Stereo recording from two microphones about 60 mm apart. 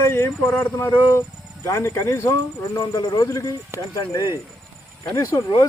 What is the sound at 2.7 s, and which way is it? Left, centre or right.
Speech, left.